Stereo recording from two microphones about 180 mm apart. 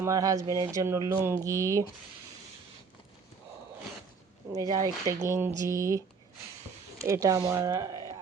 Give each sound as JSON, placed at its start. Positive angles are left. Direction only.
{"t": 0.0, "sound": "speech", "side_deg": -20}
{"t": 4.5, "sound": "speech", "side_deg": -20}
{"t": 7.0, "sound": "speech", "side_deg": -15}